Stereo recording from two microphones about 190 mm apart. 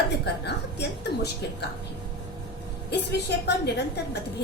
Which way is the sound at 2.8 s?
60° left (ahead or behind).